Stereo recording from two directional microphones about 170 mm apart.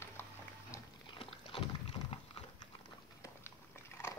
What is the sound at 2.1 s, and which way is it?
Horse, 35° left (ahead or behind).